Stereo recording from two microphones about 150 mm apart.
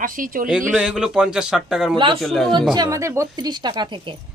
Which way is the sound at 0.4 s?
5° right (ahead or behind).